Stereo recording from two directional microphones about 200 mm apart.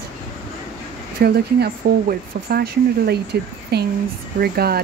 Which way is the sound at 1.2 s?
50° right (ahead or behind).